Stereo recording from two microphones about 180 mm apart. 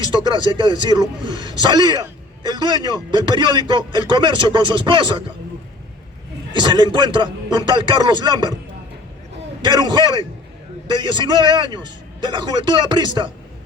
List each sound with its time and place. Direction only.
0.0 s a man's voice: 25° right (ahead or behind)
6.5 s a man's voice: 25° right (ahead or behind)
9.6 s a man's voice: 25° right (ahead or behind)